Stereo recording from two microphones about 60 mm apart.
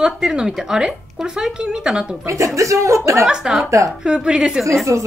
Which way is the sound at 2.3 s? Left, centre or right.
Right.